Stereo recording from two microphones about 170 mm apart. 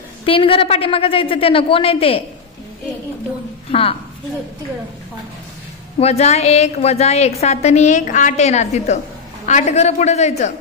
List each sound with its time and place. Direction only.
0.2 s a woman's voice: 30° left (ahead or behind)
5.9 s a woman's voice: 40° left (ahead or behind)